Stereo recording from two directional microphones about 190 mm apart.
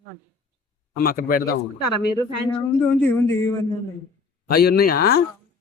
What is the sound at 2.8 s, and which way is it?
Speech, 5° left (ahead or behind).